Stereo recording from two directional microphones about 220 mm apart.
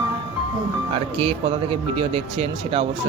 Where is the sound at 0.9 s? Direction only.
25° right (ahead or behind).